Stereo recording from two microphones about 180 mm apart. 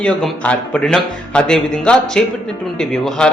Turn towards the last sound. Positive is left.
turn(degrees=5)  # may be behind; listen again after turning